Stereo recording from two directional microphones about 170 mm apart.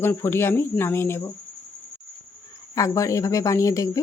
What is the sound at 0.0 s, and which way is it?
Speech, 15° left (ahead or behind).